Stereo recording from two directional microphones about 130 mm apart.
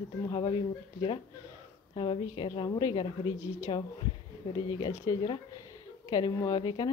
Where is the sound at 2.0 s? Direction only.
40° left (ahead or behind).